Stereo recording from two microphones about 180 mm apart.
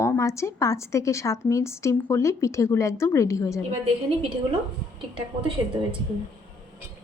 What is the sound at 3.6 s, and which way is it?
Speech, 35° right (ahead or behind).